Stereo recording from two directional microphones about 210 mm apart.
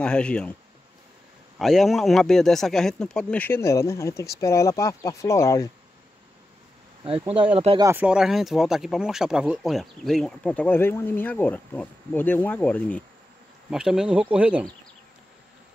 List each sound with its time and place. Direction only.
0.0 s speech: 5° left (ahead or behind)
1.6 s speech: centre (ahead or behind)
7.1 s speech: 25° right (ahead or behind)
7.8 s speech: 10° right (ahead or behind)